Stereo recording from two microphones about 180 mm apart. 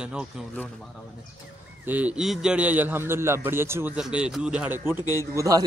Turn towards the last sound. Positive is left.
turn(degrees=-20)  # may be behind; listen again after turning